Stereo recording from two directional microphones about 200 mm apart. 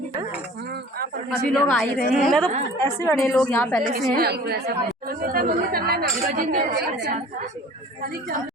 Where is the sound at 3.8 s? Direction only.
45° right (ahead or behind).